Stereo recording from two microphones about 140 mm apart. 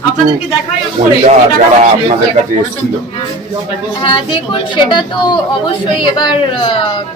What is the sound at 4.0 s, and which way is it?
A woman's voice, 35° left (ahead or behind).